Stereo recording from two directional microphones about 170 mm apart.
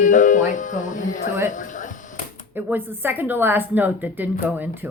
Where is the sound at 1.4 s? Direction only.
50° left (ahead or behind).